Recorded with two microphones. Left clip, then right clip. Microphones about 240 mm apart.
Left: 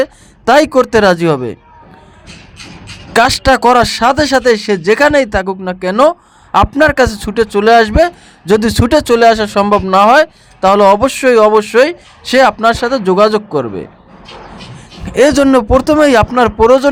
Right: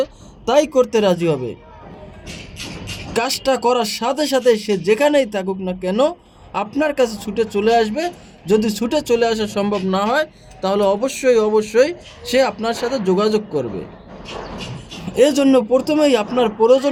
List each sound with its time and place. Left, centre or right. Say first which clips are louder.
0.0 s speech: left 8 dB; left
3.1 s speech: left 10 dB; left
15.1 s speech: left 5 dB; left